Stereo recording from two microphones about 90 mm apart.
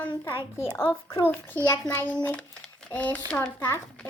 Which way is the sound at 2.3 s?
10° left (ahead or behind).